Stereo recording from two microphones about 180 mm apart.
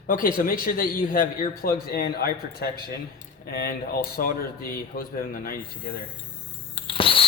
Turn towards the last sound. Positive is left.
turn(degrees=30)  # may be behind; listen again after turning